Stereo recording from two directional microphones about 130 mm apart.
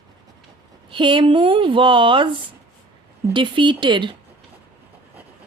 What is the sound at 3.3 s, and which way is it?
Speech, 40° right (ahead or behind).